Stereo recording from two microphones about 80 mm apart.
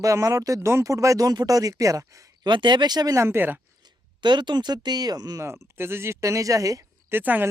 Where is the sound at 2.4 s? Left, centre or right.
Right.